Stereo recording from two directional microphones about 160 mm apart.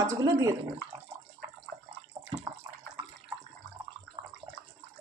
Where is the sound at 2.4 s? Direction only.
30° right (ahead or behind).